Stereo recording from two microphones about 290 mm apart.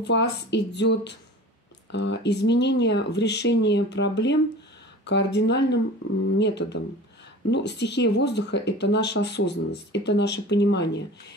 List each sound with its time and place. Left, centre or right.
0.0 s speech: left